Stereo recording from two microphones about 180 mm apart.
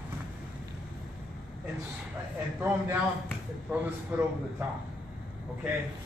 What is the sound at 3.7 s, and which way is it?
Speech, 10° right (ahead or behind).